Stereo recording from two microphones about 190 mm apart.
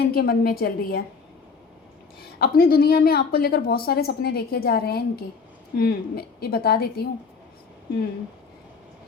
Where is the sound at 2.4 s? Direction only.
50° left (ahead or behind).